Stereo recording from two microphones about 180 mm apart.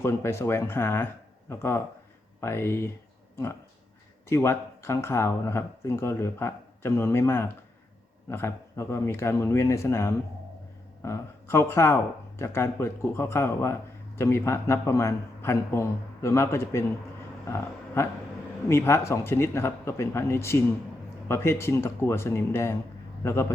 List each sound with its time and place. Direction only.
0.0 s speech: 15° left (ahead or behind)